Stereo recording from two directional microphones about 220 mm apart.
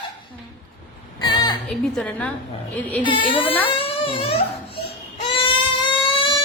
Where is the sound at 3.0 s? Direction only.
20° left (ahead or behind).